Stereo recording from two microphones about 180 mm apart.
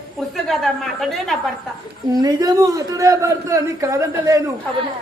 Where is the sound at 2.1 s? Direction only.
20° right (ahead or behind).